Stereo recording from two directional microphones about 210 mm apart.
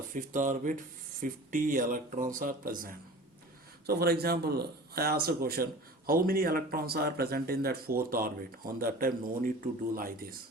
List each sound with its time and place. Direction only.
0.1 s speech: 40° right (ahead or behind)